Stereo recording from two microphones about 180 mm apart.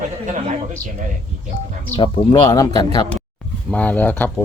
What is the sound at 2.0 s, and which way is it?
Speech, 25° left (ahead or behind).